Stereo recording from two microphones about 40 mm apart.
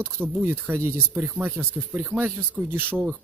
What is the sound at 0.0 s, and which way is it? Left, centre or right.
Speech, right.